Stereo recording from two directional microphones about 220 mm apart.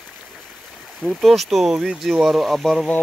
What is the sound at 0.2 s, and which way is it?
Speech, centre (ahead or behind).